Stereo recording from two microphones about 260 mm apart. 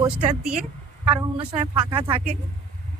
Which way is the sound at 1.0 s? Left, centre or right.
Centre.